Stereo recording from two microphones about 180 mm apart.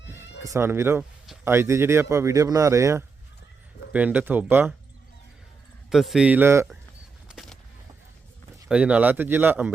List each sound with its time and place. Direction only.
0.0 s sheep: 10° right (ahead or behind)
0.4 s speech: 15° right (ahead or behind)
5.9 s speech: centre (ahead or behind)
7.3 s vehicle: centre (ahead or behind)
8.6 s speech: 5° right (ahead or behind)